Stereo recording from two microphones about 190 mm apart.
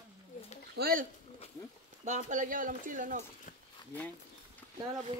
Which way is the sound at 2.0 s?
40° right (ahead or behind).